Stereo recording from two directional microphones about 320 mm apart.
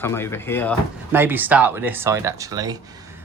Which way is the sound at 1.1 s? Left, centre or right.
Centre.